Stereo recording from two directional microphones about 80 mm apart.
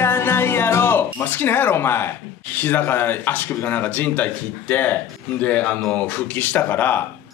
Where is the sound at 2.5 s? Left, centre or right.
Left.